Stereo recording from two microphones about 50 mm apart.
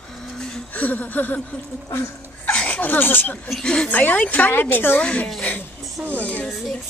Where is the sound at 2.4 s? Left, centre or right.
Left.